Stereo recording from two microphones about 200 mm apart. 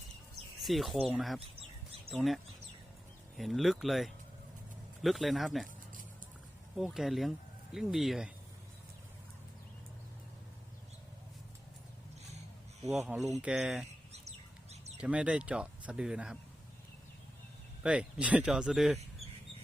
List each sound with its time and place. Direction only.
0.6 s speech: centre (ahead or behind)
6.7 s speech: centre (ahead or behind)
13.0 s speech: 5° right (ahead or behind)
14.1 s bird: 35° right (ahead or behind)
14.9 s speech: 5° right (ahead or behind)
17.8 s speech: 5° right (ahead or behind)